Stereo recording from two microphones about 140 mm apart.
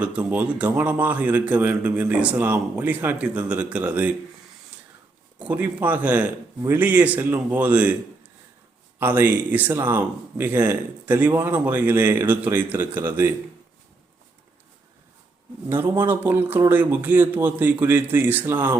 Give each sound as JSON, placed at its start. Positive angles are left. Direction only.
{"t": 0.0, "sound": "speech", "side_deg": -10}
{"t": 5.4, "sound": "speech", "side_deg": -10}
{"t": 15.7, "sound": "speech", "side_deg": -15}